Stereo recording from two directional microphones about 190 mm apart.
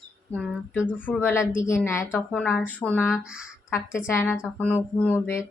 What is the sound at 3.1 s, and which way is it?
Speech, 5° right (ahead or behind).